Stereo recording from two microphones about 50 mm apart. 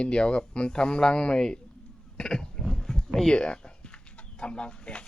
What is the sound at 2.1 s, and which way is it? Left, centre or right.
Roaring cats, centre.